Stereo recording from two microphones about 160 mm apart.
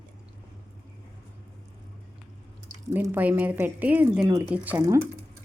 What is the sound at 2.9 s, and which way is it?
A woman's voice, 15° right (ahead or behind).